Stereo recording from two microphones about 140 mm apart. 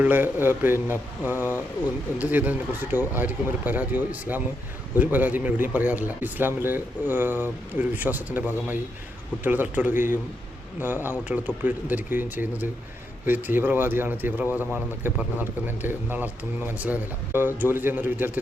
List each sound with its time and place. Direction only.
0.0 s speech: 15° right (ahead or behind)
9.9 s speech: 70° left (ahead or behind)
10.8 s speech: 15° right (ahead or behind)